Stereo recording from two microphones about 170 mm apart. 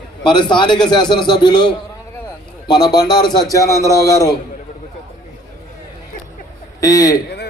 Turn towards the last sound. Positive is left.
turn(degrees=20)  # may be behind; listen again after turning